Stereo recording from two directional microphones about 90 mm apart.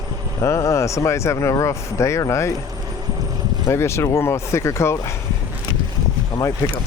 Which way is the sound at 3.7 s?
30° left (ahead or behind).